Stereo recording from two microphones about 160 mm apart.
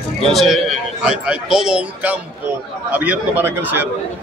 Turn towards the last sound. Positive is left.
turn(degrees=-10)  # may be behind; listen again after turning